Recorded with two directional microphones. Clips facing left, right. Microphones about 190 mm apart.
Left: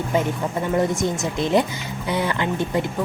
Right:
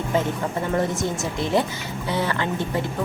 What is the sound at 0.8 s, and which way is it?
A woman's voice, 15° left (ahead or behind).